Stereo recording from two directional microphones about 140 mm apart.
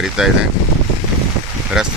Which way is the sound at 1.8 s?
5° right (ahead or behind).